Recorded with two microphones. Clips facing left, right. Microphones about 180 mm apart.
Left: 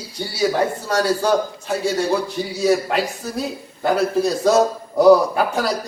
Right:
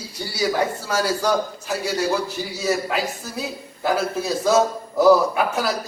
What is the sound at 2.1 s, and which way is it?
A man's voice, centre (ahead or behind).